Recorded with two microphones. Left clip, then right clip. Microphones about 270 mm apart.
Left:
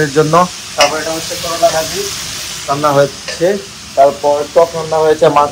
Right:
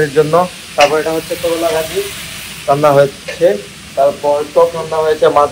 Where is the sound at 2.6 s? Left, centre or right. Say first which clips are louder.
Right 2 dB; centre; by 4.1 s left.